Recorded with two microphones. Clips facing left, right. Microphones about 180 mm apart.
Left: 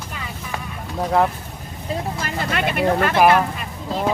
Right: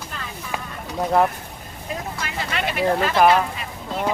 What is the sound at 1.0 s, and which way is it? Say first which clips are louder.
Speech: even; centre (ahead or behind).